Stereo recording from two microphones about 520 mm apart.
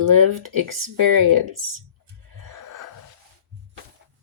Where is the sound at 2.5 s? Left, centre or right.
Right.